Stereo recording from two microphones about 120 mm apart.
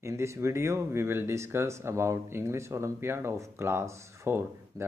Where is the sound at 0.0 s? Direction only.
25° right (ahead or behind).